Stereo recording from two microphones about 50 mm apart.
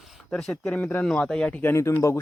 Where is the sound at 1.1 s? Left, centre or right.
Centre.